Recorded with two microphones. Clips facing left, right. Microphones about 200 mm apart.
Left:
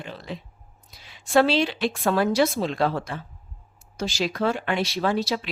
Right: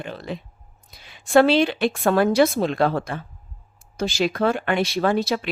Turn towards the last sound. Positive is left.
turn(degrees=-55)  # may be behind; listen again after turning